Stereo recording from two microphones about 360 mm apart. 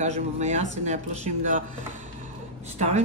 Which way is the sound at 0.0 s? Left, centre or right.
Centre.